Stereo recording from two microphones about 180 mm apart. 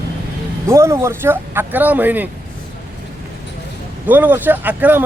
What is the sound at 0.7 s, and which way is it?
Speech, 15° right (ahead or behind).